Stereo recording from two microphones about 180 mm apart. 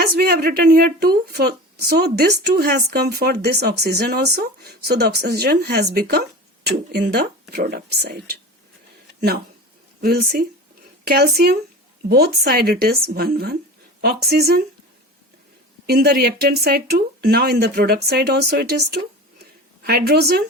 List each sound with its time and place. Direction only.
0.2 s speech: 60° right (ahead or behind)
10.0 s speech: 55° right (ahead or behind)
15.9 s speech: 60° right (ahead or behind)